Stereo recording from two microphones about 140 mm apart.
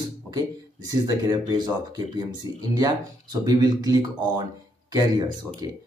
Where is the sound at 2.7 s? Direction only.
30° right (ahead or behind).